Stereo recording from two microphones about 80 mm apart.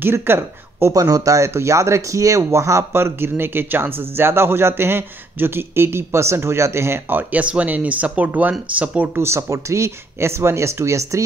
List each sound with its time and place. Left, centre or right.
0.0 s speech: right
0.9 s speech: right; by 9.2 s centre
9.2 s speech: right